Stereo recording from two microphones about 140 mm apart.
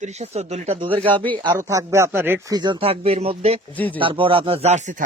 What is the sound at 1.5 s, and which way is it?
Speech, 20° right (ahead or behind).